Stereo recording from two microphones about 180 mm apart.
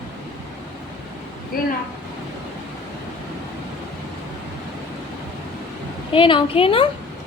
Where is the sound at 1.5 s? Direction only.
55° left (ahead or behind).